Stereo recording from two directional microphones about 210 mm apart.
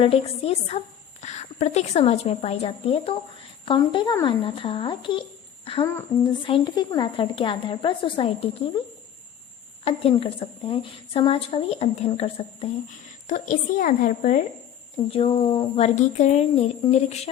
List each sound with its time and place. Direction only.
0.0 s a woman's voice: 30° left (ahead or behind)
9.8 s a woman's voice: 25° left (ahead or behind)
15.1 s speech: 25° left (ahead or behind)